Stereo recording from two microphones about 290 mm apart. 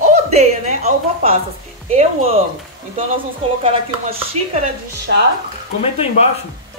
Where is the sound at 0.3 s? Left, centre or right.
Right.